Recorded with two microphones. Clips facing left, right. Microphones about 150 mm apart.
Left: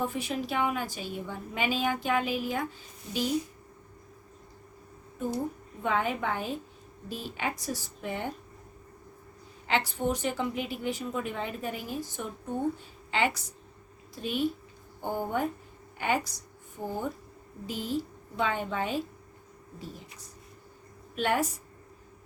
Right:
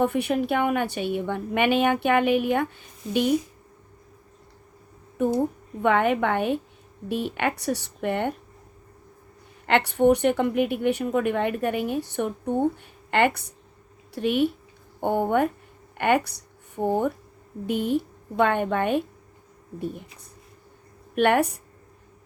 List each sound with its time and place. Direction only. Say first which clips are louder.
0.0 s a woman's voice: right 9 dB; 65° right (ahead or behind)
5.8 s a woman's voice: right 8 dB; 65° right (ahead or behind)
9.6 s a woman's voice: right 10 dB; 65° right (ahead or behind)
21.2 s a woman's voice: right 8 dB; 65° right (ahead or behind)